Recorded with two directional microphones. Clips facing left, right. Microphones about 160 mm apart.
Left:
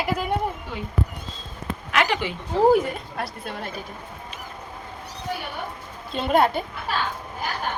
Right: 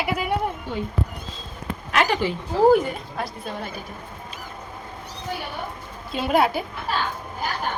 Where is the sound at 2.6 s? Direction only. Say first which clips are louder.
Right 1 dB; centre (ahead or behind).